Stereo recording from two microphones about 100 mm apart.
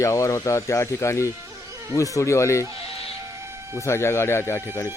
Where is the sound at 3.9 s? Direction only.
25° left (ahead or behind).